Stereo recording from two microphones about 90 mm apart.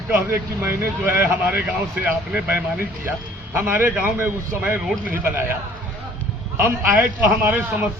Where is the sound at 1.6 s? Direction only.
10° right (ahead or behind).